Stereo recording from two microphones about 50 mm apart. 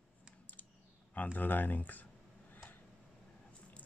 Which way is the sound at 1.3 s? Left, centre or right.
Left.